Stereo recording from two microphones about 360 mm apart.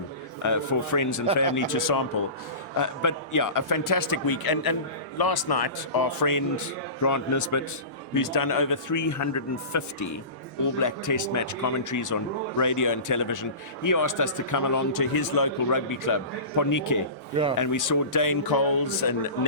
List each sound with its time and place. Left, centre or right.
0.4 s a man's voice: left
8.1 s a man's voice: left